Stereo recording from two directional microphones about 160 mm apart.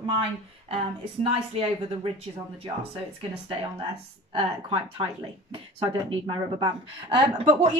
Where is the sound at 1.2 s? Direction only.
35° right (ahead or behind).